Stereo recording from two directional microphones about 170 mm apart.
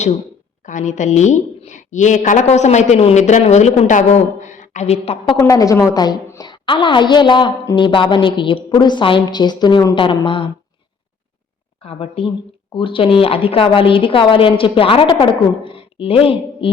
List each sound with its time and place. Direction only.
0.6 s a woman's voice: 45° left (ahead or behind)
5.4 s a woman's voice: 20° left (ahead or behind)
11.8 s a woman's voice: 35° left (ahead or behind)